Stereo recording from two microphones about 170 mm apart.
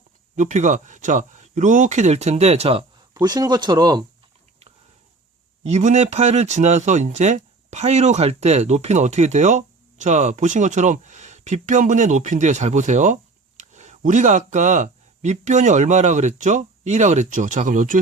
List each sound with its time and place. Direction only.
0.3 s speech: 45° right (ahead or behind); by 4.0 s 25° right (ahead or behind)
5.6 s speech: 40° right (ahead or behind)